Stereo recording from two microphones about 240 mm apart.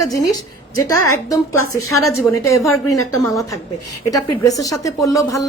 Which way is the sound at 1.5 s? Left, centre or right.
Left.